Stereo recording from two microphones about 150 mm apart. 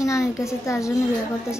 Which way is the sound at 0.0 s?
20° left (ahead or behind).